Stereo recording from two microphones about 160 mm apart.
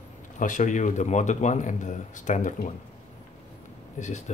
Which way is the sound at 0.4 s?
55° left (ahead or behind).